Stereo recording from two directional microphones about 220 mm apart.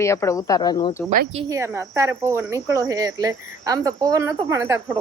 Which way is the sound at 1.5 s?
10° right (ahead or behind).